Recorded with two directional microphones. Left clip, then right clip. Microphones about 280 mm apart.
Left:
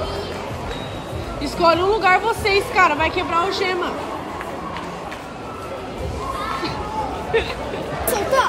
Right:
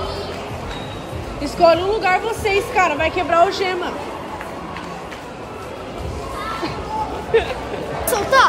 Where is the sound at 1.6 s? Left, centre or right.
Centre.